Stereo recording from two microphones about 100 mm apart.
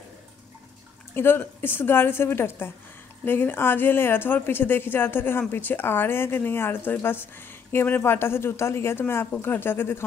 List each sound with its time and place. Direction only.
1.1 s speech: 20° left (ahead or behind)